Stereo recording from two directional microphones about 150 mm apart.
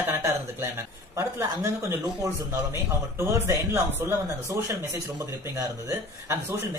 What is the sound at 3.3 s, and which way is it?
A man's voice, 15° right (ahead or behind).